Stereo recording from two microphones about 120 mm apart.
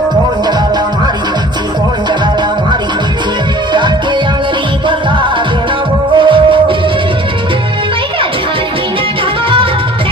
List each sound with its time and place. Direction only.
3.7 s music: 40° right (ahead or behind)
6.1 s music: 45° right (ahead or behind)